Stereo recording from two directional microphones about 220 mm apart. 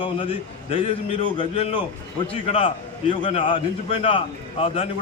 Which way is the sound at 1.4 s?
25° left (ahead or behind).